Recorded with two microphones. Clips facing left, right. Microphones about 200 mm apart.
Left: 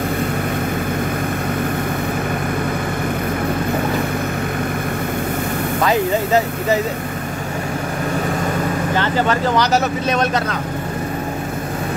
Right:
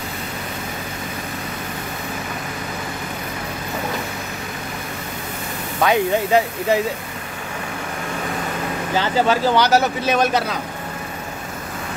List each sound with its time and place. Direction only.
5.8 s speech: centre (ahead or behind)
8.9 s speech: 5° right (ahead or behind)